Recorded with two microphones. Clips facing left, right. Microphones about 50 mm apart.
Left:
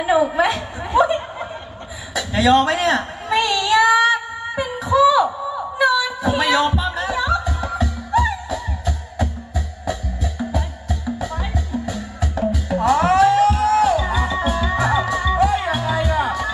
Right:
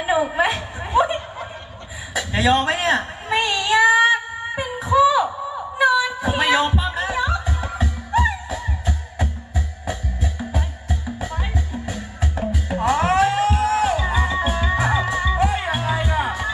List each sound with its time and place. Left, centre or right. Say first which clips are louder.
0.0 s chuckle: left 3 dB; right
2.1 s a man's voice: left 3 dB; right
3.2 s child singing: left 2 dB; right
5.8 s a sound: even; right
6.7 s music: left 1 dB; right